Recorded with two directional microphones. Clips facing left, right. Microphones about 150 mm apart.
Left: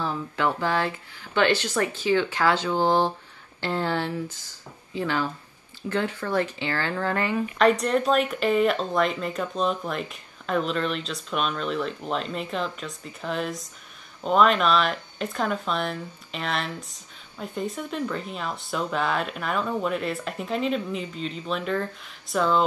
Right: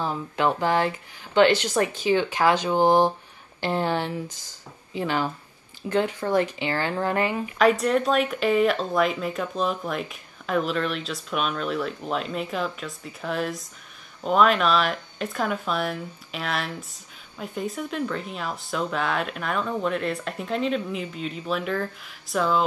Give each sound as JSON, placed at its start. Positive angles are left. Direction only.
{"t": 0.0, "sound": "speech", "side_deg": -15}
{"t": 7.5, "sound": "speech", "side_deg": 0}